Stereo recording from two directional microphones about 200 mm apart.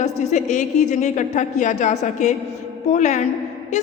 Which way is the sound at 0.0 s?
35° left (ahead or behind).